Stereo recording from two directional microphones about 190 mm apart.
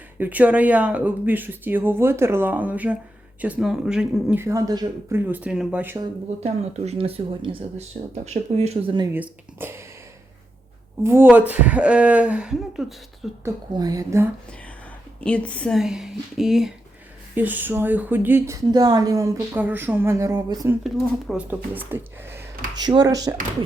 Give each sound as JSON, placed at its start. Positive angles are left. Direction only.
{"t": 0.2, "sound": "speech", "side_deg": -10}
{"t": 6.4, "sound": "speech", "side_deg": -35}
{"t": 9.1, "sound": "speech", "side_deg": -10}
{"t": 11.0, "sound": "speech", "side_deg": -10}
{"t": 13.4, "sound": "speech", "side_deg": -20}
{"t": 15.2, "sound": "speech", "side_deg": 5}
{"t": 20.8, "sound": "speech", "side_deg": 0}
{"t": 22.8, "sound": "speech", "side_deg": -20}